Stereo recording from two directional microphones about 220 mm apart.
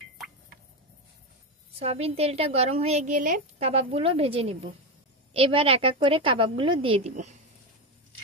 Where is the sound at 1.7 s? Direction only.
25° right (ahead or behind).